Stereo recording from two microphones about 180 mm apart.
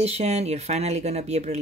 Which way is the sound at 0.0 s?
35° right (ahead or behind).